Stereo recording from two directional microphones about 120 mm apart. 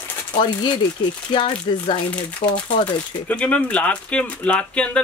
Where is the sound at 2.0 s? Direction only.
10° left (ahead or behind).